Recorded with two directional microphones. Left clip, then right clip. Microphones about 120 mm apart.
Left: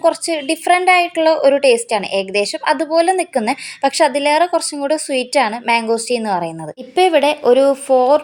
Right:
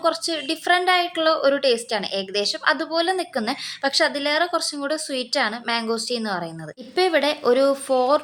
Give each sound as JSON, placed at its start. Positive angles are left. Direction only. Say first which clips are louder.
{"t": 0.0, "sound": "a woman's voice", "louder": "left 7 dB", "side_deg": 30}